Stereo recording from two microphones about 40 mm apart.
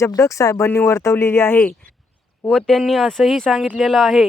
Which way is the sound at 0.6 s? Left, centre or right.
Left.